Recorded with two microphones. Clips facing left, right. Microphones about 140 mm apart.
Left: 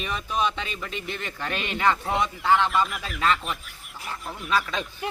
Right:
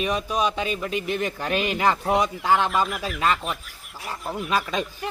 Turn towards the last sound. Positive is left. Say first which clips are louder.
# right 2 dB
turn(degrees=-15)  # may be behind; listen again after turning